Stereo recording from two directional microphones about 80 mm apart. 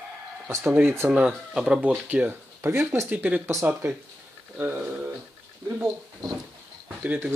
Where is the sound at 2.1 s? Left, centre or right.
Right.